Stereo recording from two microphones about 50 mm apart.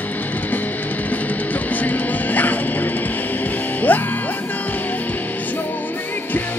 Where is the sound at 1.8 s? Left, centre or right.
Left.